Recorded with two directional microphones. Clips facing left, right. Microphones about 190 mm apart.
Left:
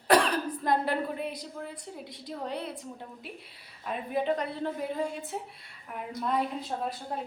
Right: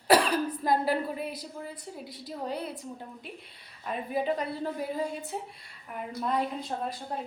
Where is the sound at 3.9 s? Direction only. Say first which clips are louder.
Even; 5° right (ahead or behind).